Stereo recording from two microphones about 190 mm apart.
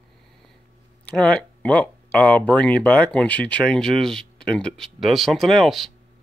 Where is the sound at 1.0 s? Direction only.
5° left (ahead or behind).